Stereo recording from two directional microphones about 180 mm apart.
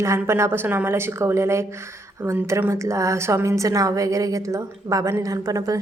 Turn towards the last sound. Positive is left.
turn(degrees=-20)  # may be behind; listen again after turning